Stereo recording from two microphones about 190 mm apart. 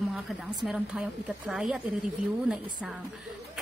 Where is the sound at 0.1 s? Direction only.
Centre (ahead or behind).